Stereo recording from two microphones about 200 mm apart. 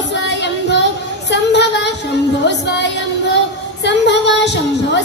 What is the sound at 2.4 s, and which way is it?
Music, 60° left (ahead or behind).